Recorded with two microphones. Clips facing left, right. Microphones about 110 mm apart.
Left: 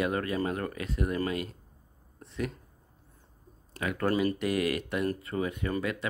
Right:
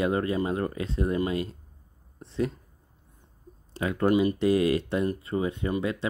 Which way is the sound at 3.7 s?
30° right (ahead or behind).